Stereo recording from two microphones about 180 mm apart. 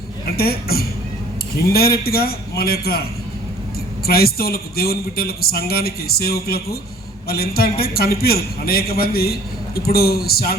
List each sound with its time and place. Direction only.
0.3 s a man's voice: 60° left (ahead or behind)
4.0 s a man's voice: 60° left (ahead or behind)